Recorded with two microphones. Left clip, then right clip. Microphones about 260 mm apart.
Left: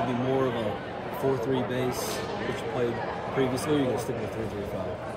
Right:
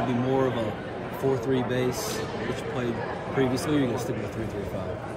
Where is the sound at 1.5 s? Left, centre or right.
Right.